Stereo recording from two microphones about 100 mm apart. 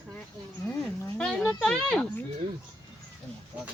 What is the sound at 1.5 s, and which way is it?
Speech, 10° left (ahead or behind).